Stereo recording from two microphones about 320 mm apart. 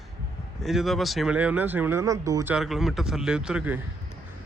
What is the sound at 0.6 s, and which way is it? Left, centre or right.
Speech, centre.